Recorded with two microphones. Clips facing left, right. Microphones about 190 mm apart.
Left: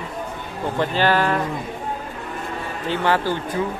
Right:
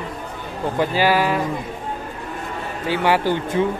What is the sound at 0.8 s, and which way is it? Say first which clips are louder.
Speech: right 1 dB; 10° right (ahead or behind).